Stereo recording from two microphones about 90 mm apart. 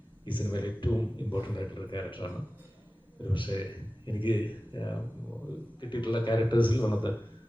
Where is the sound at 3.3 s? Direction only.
65° left (ahead or behind).